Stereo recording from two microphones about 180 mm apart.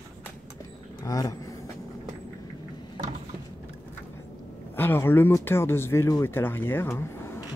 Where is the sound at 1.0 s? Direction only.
20° left (ahead or behind).